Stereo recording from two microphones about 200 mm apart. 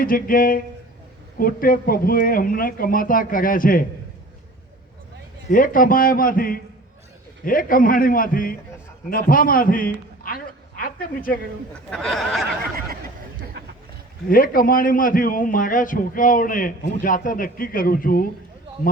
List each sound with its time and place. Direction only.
0.0 s a man's voice: 45° left (ahead or behind)
5.5 s a man's voice: 45° left (ahead or behind)
10.2 s a sound: 45° left (ahead or behind)
11.9 s speech: centre (ahead or behind)
14.3 s a man's voice: 45° left (ahead or behind)